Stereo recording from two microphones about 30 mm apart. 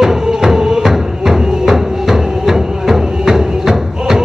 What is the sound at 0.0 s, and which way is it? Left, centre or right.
Music, centre.